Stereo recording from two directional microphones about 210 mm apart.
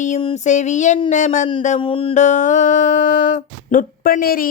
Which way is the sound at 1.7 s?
25° left (ahead or behind).